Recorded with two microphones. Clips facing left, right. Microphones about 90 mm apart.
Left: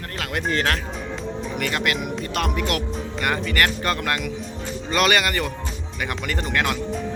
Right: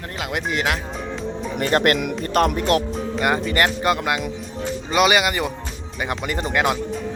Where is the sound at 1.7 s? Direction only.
45° right (ahead or behind).